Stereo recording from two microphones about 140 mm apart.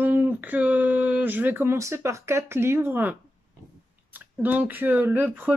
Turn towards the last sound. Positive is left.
turn(degrees=-15)  # may be behind; listen again after turning